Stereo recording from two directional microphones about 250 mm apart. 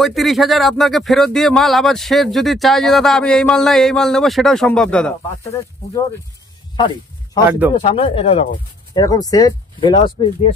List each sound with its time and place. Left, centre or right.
0.0 s speech: centre
7.4 s speech: centre
7.8 s speech: left